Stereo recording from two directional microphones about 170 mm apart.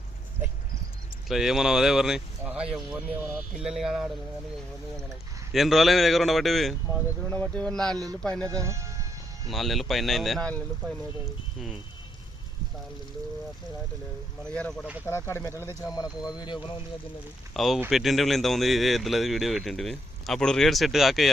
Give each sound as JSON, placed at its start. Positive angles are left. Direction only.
{"t": 1.3, "sound": "speech", "side_deg": 0}
{"t": 5.5, "sound": "speech", "side_deg": 0}
{"t": 7.9, "sound": "speech", "side_deg": -20}
{"t": 8.2, "sound": "speech", "side_deg": 5}
{"t": 8.4, "sound": "speech", "side_deg": -20}
{"t": 9.5, "sound": "speech", "side_deg": 0}
{"t": 14.5, "sound": "speech", "side_deg": 5}
{"t": 17.5, "sound": "speech", "side_deg": 0}